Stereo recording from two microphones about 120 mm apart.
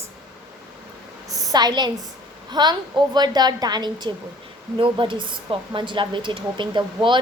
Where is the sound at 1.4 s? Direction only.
30° right (ahead or behind).